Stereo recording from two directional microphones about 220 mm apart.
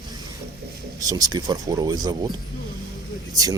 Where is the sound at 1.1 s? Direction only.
15° right (ahead or behind).